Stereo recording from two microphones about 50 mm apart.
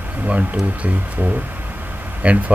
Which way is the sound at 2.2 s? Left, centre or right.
Right.